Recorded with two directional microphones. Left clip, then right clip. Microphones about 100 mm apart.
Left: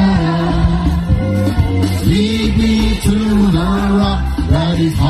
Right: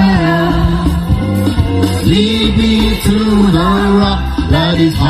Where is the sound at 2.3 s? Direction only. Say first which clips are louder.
Right 3 dB; 15° right (ahead or behind).